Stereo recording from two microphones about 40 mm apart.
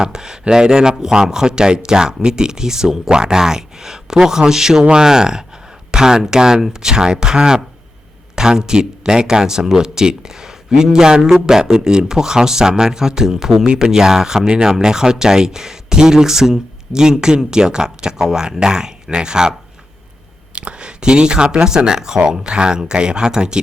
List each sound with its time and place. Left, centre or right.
0.0 s speech: centre
20.6 s speech: right